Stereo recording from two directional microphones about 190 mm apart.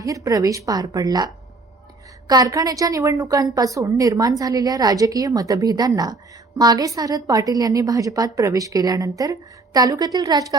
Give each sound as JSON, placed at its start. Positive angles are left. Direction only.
{"t": 0.0, "sound": "a woman's voice", "side_deg": -20}